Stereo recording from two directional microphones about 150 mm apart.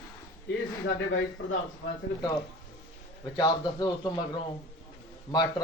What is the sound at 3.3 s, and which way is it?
Speech, 25° left (ahead or behind).